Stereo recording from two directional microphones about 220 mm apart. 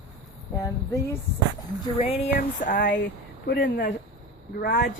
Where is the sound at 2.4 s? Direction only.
40° left (ahead or behind).